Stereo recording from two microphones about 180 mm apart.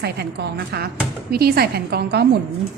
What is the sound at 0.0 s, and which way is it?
A woman's voice, 65° right (ahead or behind).